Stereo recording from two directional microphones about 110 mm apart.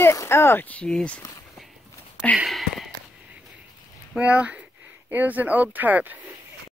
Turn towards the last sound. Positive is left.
turn(degrees=-15)  # may be behind; listen again after turning